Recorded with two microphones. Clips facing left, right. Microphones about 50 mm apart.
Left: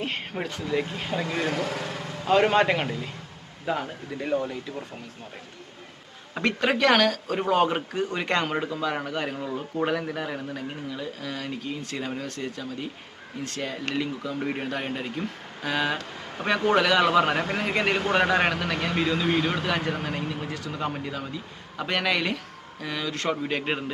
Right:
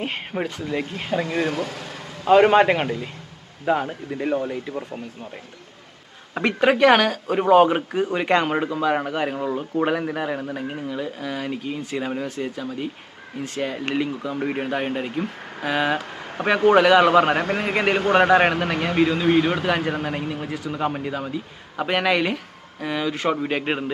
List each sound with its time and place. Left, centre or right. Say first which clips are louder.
0.0 s speech: right 4 dB; centre
1.5 s speech: right 2 dB; centre
2.2 s speech: right 6 dB; centre
6.3 s speech: right 5 dB; centre